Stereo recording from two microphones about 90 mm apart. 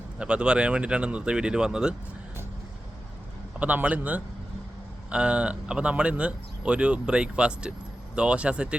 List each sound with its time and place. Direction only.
0.2 s speech: 10° right (ahead or behind)
3.6 s speech: 15° right (ahead or behind)